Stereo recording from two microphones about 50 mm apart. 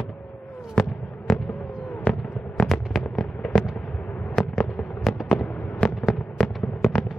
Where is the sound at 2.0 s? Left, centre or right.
Left.